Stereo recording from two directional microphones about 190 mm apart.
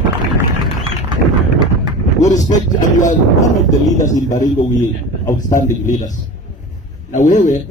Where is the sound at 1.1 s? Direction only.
25° right (ahead or behind).